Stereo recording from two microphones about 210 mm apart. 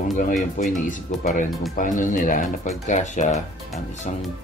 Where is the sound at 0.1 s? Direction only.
40° left (ahead or behind).